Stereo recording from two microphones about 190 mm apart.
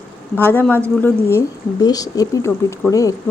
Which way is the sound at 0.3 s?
10° left (ahead or behind).